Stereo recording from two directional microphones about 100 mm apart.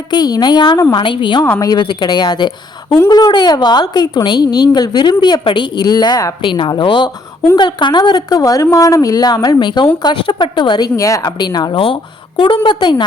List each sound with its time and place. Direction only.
0.1 s a woman's voice: 45° left (ahead or behind)
1.5 s a woman's voice: 40° left (ahead or behind)
1.8 s a woman's voice: 50° left (ahead or behind)
6.4 s a woman's voice: 55° left (ahead or behind)